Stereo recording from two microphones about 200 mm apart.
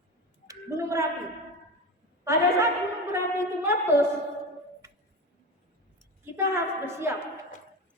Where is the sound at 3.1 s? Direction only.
15° right (ahead or behind).